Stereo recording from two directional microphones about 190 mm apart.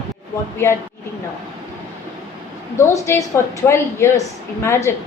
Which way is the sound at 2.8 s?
15° left (ahead or behind).